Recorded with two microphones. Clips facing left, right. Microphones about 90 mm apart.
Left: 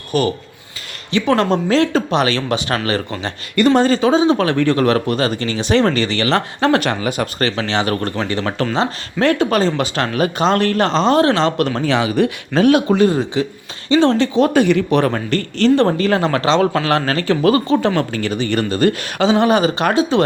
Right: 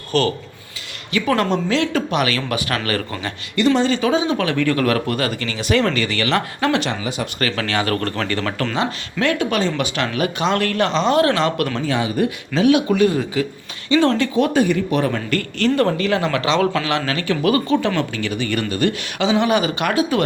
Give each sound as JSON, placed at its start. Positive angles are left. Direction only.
{"t": 0.1, "sound": "speech", "side_deg": 15}
{"t": 1.1, "sound": "speech", "side_deg": 30}
{"t": 3.5, "sound": "speech", "side_deg": 50}
{"t": 4.0, "sound": "speech", "side_deg": 30}
{"t": 6.7, "sound": "speech", "side_deg": 55}
{"t": 7.3, "sound": "speech", "side_deg": 25}
{"t": 8.7, "sound": "speech", "side_deg": 30}
{"t": 11.9, "sound": "speech", "side_deg": 90}
{"t": 12.5, "sound": "speech", "side_deg": 45}
{"t": 12.9, "sound": "speech", "side_deg": 30}
{"t": 14.5, "sound": "speech", "side_deg": 70}
{"t": 15.3, "sound": "speech", "side_deg": 35}